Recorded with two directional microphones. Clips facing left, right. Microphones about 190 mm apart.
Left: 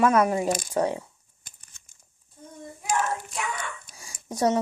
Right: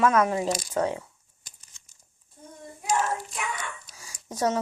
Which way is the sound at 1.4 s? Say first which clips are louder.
Left 1 dB; 55° left (ahead or behind).